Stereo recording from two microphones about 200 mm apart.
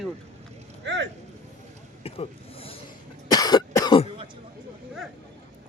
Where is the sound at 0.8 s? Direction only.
60° right (ahead or behind).